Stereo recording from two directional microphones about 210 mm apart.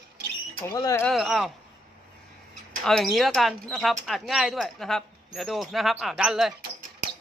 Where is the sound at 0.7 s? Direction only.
15° left (ahead or behind).